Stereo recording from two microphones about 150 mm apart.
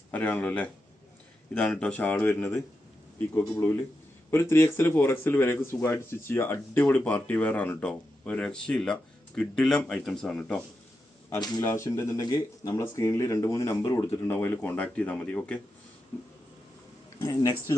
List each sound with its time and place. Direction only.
0.1 s speech: 10° left (ahead or behind)
11.3 s speech: 30° left (ahead or behind)
11.6 s speech: 15° left (ahead or behind)
17.2 s speech: 25° left (ahead or behind)